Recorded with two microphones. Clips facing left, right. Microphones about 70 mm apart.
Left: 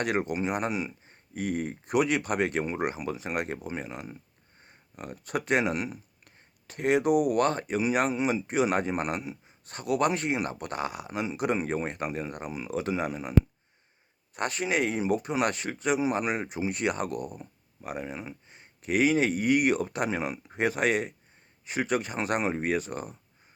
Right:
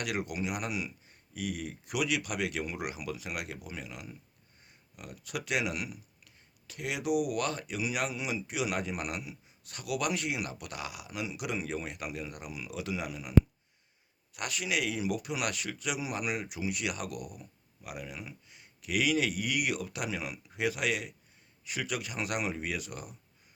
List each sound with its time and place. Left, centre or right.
0.0 s speech: left
14.3 s speech: left